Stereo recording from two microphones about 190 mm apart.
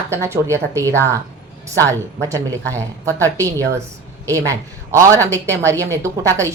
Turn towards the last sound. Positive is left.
turn(degrees=-15)  # may be behind; listen again after turning